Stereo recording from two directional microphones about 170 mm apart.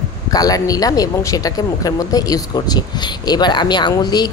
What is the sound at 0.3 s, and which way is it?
Speech, 20° left (ahead or behind).